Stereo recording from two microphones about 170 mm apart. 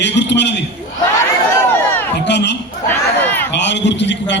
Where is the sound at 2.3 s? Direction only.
90° left.